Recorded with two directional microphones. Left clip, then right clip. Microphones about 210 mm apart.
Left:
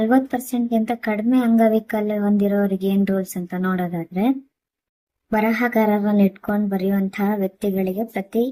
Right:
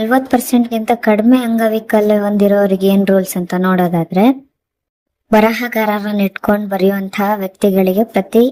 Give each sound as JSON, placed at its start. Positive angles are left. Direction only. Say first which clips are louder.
{"t": 0.0, "sound": "speech", "louder": "right 6 dB", "side_deg": -40}